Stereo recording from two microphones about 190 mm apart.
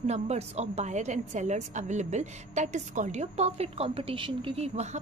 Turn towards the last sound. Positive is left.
turn(degrees=-35)  # may be behind; listen again after turning